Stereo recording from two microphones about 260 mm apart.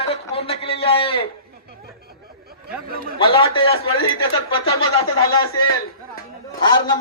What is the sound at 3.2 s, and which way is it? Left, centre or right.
Speech, centre.